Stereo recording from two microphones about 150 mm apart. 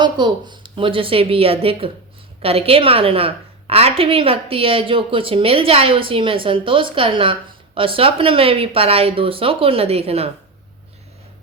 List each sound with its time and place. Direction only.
0.0 s a woman's voice: 30° right (ahead or behind)